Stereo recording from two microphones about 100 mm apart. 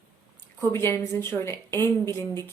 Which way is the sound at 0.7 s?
25° left (ahead or behind).